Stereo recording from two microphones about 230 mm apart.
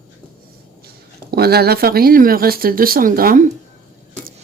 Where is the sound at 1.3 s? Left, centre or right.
Right.